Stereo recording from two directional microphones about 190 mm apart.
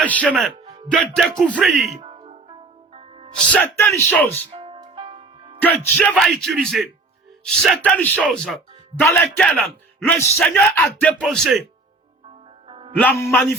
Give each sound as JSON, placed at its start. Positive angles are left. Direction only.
{"t": 0.0, "sound": "speech", "side_deg": 5}
{"t": 0.5, "sound": "music", "side_deg": -35}
{"t": 0.9, "sound": "speech", "side_deg": 0}
{"t": 2.0, "sound": "music", "side_deg": -30}
{"t": 3.5, "sound": "speech", "side_deg": 10}
{"t": 4.5, "sound": "music", "side_deg": -30}
{"t": 5.5, "sound": "speech", "side_deg": 10}
{"t": 12.6, "sound": "music", "side_deg": -30}
{"t": 13.0, "sound": "speech", "side_deg": 10}